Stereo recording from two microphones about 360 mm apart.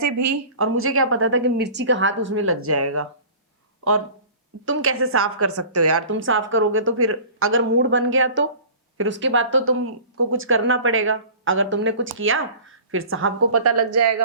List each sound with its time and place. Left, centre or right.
0.0 s a woman's voice: right
4.6 s a woman's voice: right